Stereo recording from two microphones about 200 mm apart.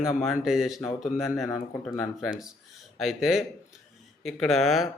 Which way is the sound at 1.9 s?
Centre (ahead or behind).